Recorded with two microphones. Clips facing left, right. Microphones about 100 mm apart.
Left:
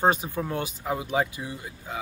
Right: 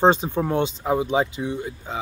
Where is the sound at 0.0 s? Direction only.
25° right (ahead or behind).